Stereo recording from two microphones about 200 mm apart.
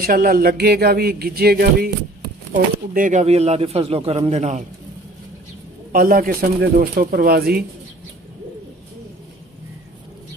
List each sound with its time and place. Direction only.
0.0 s speech: 45° right (ahead or behind)
5.9 s speech: 45° right (ahead or behind)